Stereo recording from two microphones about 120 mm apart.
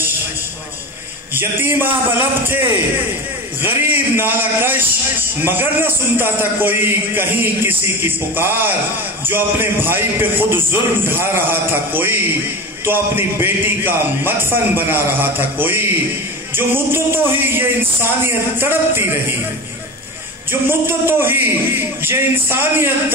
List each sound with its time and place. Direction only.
1.3 s a man's voice: 20° right (ahead or behind)
3.6 s a man's voice: 15° right (ahead or behind)
20.8 s a man's voice: 20° right (ahead or behind)